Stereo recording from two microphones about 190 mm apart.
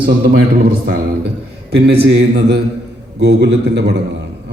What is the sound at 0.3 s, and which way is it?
A man's voice, 55° right (ahead or behind).